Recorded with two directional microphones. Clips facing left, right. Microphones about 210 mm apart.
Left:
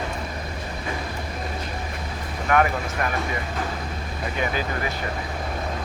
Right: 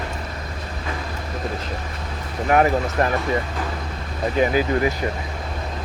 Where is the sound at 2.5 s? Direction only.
35° right (ahead or behind).